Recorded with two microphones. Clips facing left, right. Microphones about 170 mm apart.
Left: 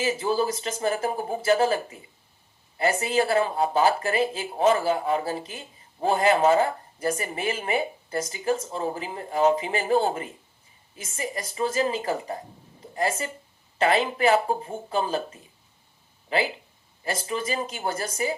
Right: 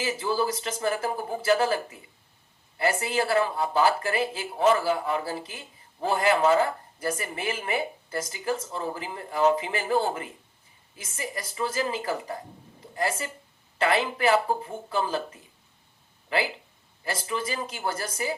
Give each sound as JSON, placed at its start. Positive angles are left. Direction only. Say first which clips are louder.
{"t": 0.0, "sound": "speech", "louder": "left 2 dB", "side_deg": 20}